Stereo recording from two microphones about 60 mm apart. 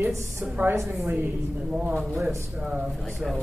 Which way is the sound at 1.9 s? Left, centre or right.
Centre.